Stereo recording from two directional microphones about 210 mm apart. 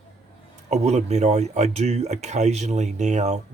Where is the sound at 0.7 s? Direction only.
30° right (ahead or behind).